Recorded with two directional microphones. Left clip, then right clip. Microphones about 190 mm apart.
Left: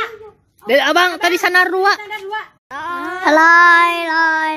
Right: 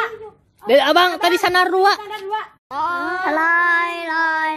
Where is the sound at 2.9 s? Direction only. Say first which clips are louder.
Left 10 dB; 55° left (ahead or behind).